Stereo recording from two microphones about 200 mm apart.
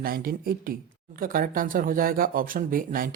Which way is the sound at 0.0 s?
45° right (ahead or behind).